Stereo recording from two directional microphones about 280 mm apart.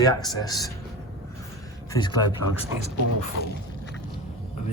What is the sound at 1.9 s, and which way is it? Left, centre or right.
Speech, centre.